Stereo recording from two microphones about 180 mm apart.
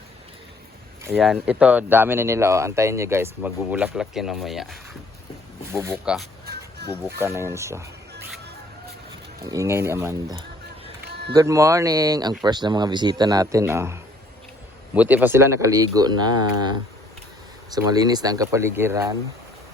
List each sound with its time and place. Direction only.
1.2 s speech: 5° right (ahead or behind)
5.7 s speech: 15° right (ahead or behind)
6.5 s a sound: 65° right (ahead or behind)
7.2 s speech: 15° right (ahead or behind)
9.4 s speech: 20° right (ahead or behind)
11.0 s a sound: 65° right (ahead or behind)
11.3 s speech: 15° right (ahead or behind)
17.7 s speech: 20° right (ahead or behind)